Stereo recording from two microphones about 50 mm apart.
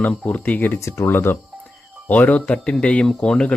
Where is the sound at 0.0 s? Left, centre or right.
Left.